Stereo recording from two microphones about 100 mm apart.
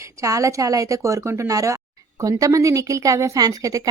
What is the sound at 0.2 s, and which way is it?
A woman's voice, 35° right (ahead or behind).